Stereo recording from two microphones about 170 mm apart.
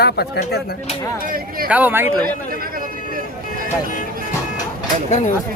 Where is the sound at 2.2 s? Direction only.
60° right (ahead or behind).